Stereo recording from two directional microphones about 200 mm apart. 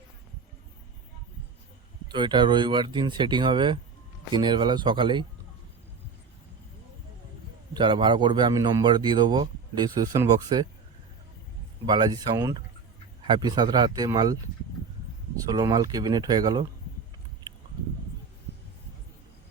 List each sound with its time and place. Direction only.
2.0 s a man's voice: 25° right (ahead or behind)
7.7 s a man's voice: 25° right (ahead or behind)
11.9 s a man's voice: 20° right (ahead or behind)
15.4 s a man's voice: 20° right (ahead or behind)